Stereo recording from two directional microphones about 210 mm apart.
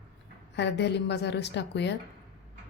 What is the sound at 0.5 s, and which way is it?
Speech, 55° left (ahead or behind).